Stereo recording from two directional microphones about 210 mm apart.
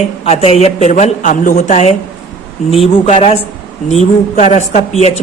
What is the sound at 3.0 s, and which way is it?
Speech, 30° left (ahead or behind).